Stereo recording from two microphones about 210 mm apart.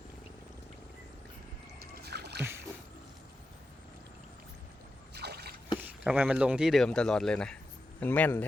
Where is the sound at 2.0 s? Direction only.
50° right (ahead or behind).